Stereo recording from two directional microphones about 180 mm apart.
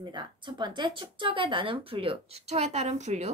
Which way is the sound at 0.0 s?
25° right (ahead or behind).